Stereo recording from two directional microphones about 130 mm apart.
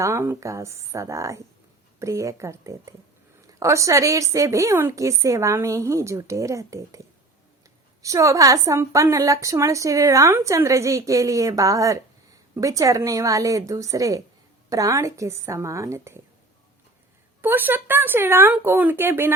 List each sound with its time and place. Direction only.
0.0 s a woman's voice: 20° right (ahead or behind)
8.0 s a woman's voice: 25° right (ahead or behind)
17.4 s speech: 15° right (ahead or behind)